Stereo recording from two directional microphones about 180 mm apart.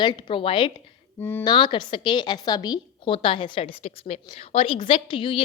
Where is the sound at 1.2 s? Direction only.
10° left (ahead or behind).